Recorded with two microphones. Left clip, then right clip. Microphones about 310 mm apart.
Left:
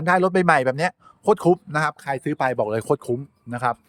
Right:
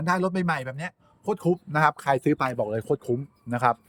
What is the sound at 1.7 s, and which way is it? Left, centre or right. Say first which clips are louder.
Speech: right 2 dB; centre.